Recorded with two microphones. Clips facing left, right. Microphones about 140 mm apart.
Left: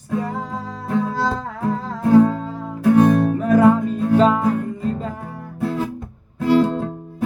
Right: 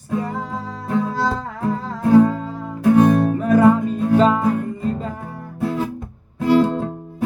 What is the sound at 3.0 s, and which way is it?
Music, 20° right (ahead or behind).